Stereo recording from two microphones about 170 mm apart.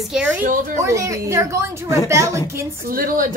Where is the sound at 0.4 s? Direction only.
55° right (ahead or behind).